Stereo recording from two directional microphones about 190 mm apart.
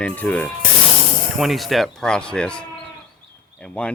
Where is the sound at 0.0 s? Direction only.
5° left (ahead or behind).